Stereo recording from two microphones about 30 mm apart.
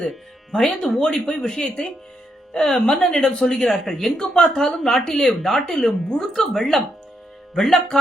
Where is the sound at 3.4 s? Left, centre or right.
Left.